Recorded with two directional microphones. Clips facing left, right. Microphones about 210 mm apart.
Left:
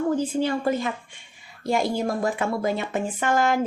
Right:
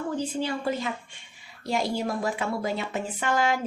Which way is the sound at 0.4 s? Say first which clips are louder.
Left 5 dB; 50° left (ahead or behind).